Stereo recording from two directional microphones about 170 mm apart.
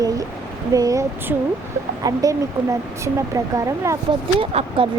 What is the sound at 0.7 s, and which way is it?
Speech, 20° right (ahead or behind).